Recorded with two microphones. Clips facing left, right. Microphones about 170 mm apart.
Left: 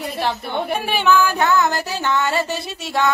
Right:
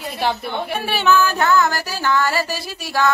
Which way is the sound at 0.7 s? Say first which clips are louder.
Even; 15° left (ahead or behind).